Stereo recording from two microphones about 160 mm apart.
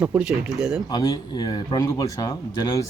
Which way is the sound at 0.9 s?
25° left (ahead or behind).